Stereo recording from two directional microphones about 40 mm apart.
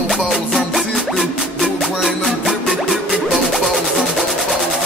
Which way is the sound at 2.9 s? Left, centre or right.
Centre.